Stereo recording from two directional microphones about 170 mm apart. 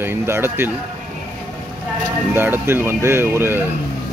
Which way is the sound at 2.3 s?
10° right (ahead or behind).